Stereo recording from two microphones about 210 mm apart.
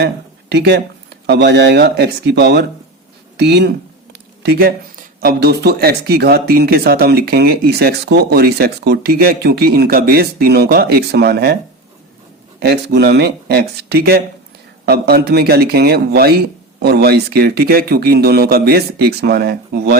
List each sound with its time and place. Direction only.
0.0 s speech: 50° right (ahead or behind)
12.5 s speech: 50° right (ahead or behind)